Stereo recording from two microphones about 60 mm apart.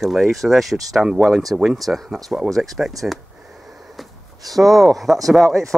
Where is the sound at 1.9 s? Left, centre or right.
Centre.